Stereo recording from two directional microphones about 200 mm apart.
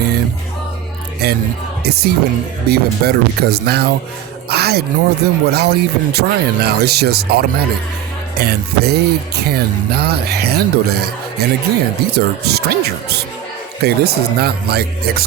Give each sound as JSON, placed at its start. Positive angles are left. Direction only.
{"t": 1.2, "sound": "speech", "side_deg": -55}